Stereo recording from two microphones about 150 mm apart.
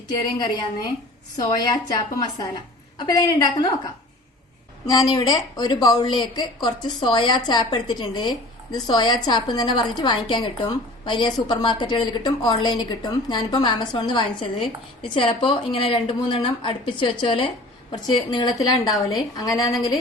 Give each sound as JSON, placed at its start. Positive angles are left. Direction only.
{"t": 1.4, "sound": "a woman's voice", "side_deg": 30}
{"t": 4.9, "sound": "a woman's voice", "side_deg": 30}